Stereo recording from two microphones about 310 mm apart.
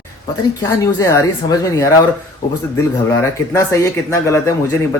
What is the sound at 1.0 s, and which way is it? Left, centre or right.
Speech, centre.